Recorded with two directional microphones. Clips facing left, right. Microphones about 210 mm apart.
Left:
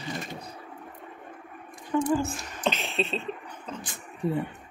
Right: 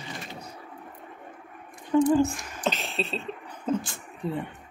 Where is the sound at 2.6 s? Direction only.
Centre (ahead or behind).